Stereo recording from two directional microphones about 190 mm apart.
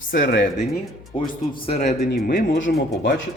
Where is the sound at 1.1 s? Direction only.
35° left (ahead or behind).